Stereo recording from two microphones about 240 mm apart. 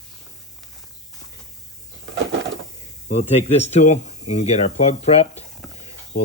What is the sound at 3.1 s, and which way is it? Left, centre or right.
Speech, left.